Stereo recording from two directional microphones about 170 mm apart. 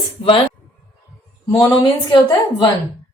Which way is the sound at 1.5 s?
20° left (ahead or behind).